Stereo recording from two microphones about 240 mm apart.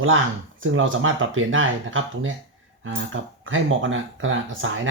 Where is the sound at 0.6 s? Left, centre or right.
Right.